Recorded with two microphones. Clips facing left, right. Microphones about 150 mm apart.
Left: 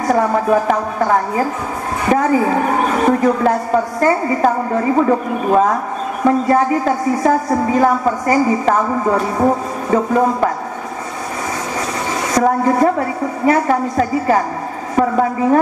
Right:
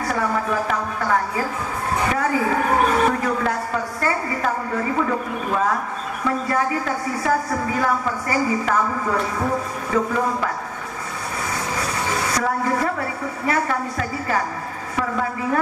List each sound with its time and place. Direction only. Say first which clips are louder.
0.0 s a woman's voice: left 8 dB; 35° left (ahead or behind)
12.4 s a woman's voice: left 11 dB; 35° left (ahead or behind)